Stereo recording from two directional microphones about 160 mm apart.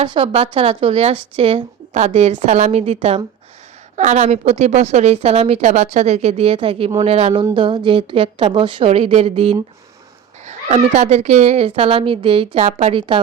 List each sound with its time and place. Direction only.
0.0 s a woman's voice: 35° right (ahead or behind)